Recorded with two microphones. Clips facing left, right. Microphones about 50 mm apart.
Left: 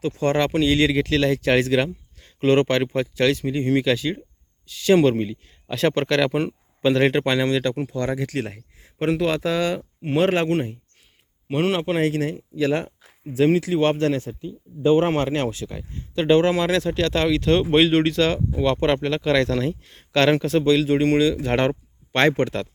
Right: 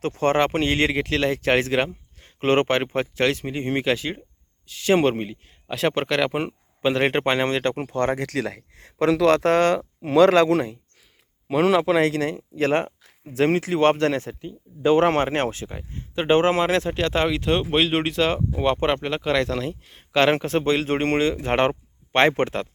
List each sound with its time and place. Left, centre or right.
0.0 s speech: right
8.2 s speech: right
11.9 s a man's voice: right
15.3 s speech: right
15.7 s speech: right; by 17.9 s centre
17.9 s speech: centre
19.0 s speech: centre
20.3 s speech: right
20.8 s speech: right